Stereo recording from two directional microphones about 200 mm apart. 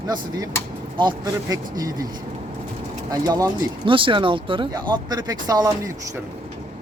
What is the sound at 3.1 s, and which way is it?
Speech, 20° right (ahead or behind).